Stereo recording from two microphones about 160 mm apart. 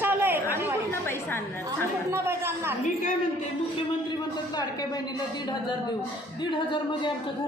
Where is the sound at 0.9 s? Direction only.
15° left (ahead or behind).